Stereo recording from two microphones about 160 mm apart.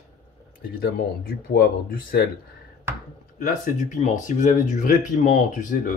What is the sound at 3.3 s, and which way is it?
Speech, 55° left (ahead or behind).